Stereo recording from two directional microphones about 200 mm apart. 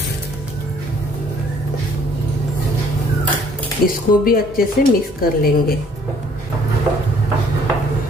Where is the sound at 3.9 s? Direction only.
45° left (ahead or behind).